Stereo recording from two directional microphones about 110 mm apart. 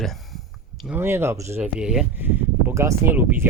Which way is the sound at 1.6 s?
10° right (ahead or behind).